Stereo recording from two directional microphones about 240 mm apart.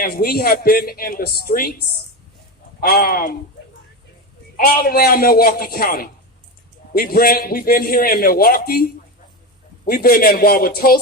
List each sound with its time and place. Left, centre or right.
0.0 s speech: left
4.5 s speech: left